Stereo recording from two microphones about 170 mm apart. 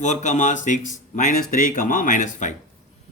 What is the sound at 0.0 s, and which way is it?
Speech, 45° left (ahead or behind).